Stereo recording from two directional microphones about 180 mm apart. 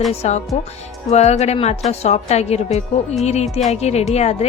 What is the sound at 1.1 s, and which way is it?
A woman's voice, 40° left (ahead or behind).